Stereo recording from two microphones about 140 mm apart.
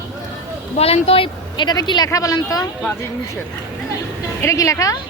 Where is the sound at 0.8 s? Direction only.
45° left (ahead or behind); by 2.6 s 25° left (ahead or behind).